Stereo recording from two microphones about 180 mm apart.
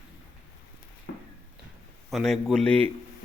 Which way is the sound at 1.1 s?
65° left (ahead or behind).